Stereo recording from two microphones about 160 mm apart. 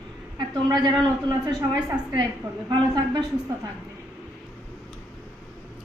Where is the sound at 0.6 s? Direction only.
25° right (ahead or behind).